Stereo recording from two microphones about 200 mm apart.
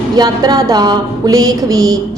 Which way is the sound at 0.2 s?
20° right (ahead or behind).